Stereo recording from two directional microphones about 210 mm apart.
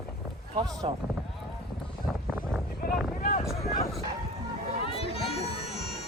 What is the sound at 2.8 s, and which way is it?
Boat, 40° left (ahead or behind).